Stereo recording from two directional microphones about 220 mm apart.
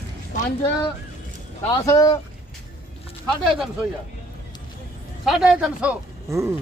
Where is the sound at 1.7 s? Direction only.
15° left (ahead or behind).